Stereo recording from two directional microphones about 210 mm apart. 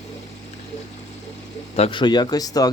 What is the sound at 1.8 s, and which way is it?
Speech, 25° left (ahead or behind).